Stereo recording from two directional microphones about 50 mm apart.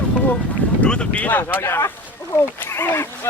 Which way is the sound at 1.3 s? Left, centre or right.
Left.